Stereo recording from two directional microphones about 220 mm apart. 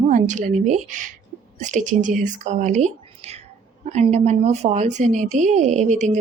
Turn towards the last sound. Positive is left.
turn(degrees=-35)  # may be behind; listen again after turning